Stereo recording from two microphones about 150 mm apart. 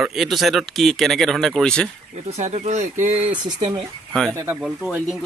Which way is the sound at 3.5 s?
35° right (ahead or behind).